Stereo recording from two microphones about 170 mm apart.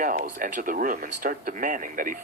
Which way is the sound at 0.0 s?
50° right (ahead or behind).